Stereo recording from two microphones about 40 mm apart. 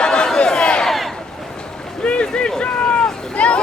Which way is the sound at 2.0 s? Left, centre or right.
Left.